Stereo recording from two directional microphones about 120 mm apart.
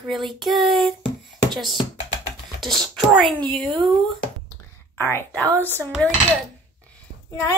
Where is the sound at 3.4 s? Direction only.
Centre (ahead or behind).